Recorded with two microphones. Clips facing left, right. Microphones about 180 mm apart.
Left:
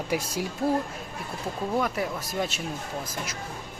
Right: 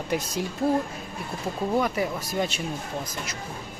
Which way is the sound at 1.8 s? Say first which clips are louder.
Right 2 dB; centre (ahead or behind).